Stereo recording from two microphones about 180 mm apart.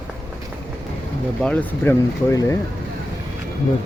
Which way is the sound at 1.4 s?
5° left (ahead or behind).